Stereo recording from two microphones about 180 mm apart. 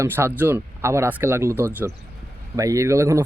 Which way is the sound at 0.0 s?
15° right (ahead or behind).